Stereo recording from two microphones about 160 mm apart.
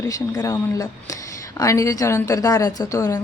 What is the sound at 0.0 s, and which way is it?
A woman's voice, 20° left (ahead or behind).